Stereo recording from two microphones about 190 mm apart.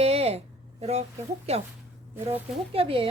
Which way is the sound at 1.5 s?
35° right (ahead or behind).